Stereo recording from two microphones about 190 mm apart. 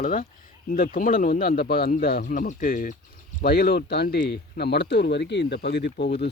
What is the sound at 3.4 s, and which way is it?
Speech, 55° left (ahead or behind).